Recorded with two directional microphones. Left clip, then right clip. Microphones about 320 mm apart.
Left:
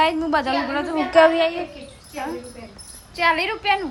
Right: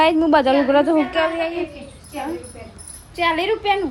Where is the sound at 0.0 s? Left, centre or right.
Centre.